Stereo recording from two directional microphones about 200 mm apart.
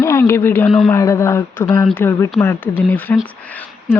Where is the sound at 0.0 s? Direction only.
15° left (ahead or behind).